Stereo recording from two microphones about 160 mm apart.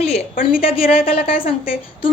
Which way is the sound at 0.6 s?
35° left (ahead or behind).